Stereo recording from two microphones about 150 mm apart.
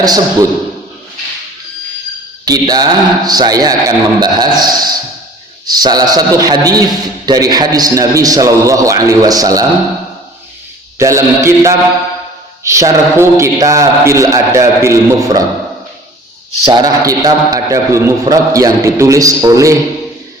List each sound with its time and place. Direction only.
0.0 s a man's voice: 25° right (ahead or behind)
2.4 s a man's voice: 25° right (ahead or behind)
10.9 s a man's voice: 20° right (ahead or behind)
16.6 s a man's voice: 25° right (ahead or behind)